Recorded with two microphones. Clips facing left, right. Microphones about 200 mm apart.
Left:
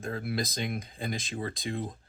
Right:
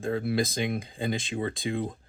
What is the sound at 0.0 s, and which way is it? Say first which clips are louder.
Speech: right 6 dB; 25° right (ahead or behind).